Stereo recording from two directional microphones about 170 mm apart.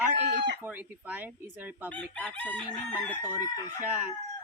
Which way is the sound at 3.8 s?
10° right (ahead or behind).